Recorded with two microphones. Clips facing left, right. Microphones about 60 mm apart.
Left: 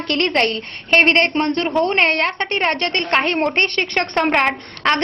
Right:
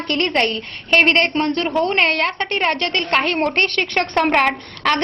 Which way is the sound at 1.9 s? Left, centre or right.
Left.